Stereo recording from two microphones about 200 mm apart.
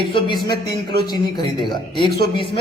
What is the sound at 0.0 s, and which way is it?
A man's voice, 25° left (ahead or behind).